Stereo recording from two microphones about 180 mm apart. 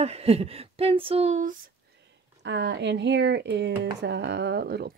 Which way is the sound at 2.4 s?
75° right (ahead or behind).